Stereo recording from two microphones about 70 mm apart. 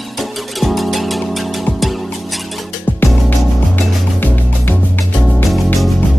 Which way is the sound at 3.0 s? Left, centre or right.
Left.